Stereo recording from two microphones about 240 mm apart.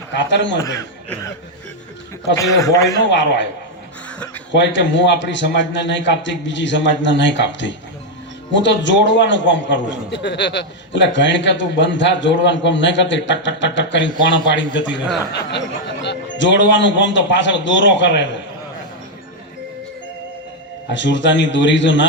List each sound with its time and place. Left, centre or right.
0.2 s a man's voice: left
0.6 s a man's voice: centre
2.3 s a man's voice: centre
3.0 s a man's voice: left
4.5 s a man's voice: left
16.0 s a man's voice: left
20.9 s a man's voice: left